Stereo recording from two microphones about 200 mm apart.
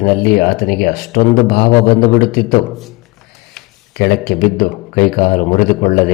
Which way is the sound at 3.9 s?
50° left (ahead or behind).